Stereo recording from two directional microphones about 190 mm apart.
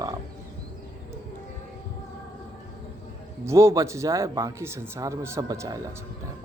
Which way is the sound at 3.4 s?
15° right (ahead or behind).